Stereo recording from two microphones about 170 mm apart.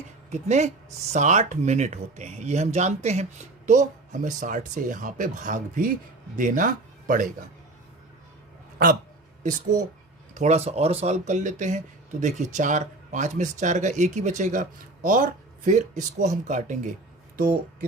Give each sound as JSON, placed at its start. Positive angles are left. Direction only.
{"t": 0.3, "sound": "speech", "side_deg": -40}
{"t": 9.4, "sound": "speech", "side_deg": -50}